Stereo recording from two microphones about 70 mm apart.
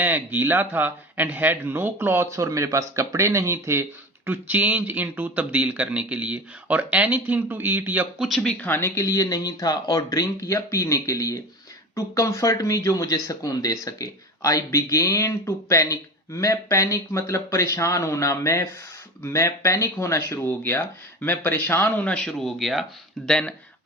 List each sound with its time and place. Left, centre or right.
0.0 s speech: right
4.3 s speech: right
8.4 s speech: centre
8.8 s speech: left; by 23.3 s centre
23.3 s speech: centre